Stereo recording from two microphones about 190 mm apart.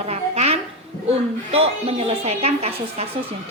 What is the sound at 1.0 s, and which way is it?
A woman's voice, 30° right (ahead or behind).